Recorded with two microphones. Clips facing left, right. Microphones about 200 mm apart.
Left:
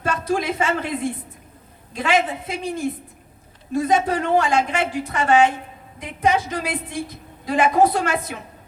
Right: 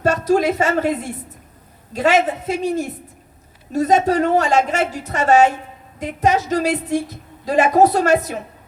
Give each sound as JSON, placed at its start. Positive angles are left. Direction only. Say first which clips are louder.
{"t": 0.0, "sound": "a woman's voice", "louder": "right 7 dB", "side_deg": -40}